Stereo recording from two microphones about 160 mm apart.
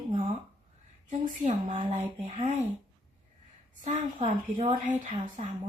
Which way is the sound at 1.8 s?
30° right (ahead or behind).